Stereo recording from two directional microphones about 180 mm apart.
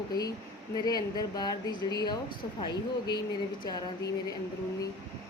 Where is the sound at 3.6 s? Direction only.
20° left (ahead or behind).